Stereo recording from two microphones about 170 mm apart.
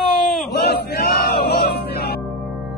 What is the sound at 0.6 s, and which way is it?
Music, 70° left (ahead or behind).